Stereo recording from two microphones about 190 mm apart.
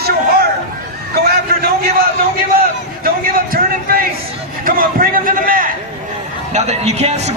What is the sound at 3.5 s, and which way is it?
A man's voice, 50° right (ahead or behind).